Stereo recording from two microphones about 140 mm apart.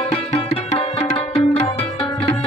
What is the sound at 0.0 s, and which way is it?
Music, 45° left (ahead or behind).